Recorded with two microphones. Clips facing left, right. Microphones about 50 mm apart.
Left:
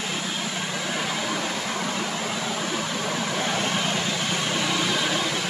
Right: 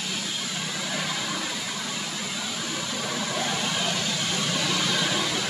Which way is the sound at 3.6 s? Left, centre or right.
Left.